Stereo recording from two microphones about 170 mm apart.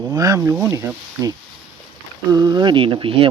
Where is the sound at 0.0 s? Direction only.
20° right (ahead or behind).